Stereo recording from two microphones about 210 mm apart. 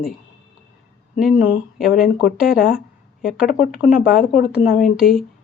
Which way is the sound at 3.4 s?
40° left (ahead or behind).